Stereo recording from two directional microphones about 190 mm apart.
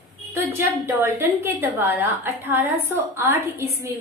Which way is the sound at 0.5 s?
10° right (ahead or behind).